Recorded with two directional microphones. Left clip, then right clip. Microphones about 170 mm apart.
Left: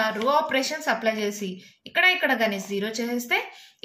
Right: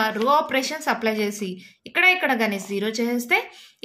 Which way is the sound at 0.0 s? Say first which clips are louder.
Right 2 dB; 35° right (ahead or behind).